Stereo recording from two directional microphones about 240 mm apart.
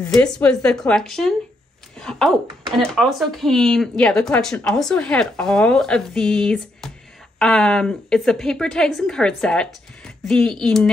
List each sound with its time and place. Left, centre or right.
0.0 s speech: centre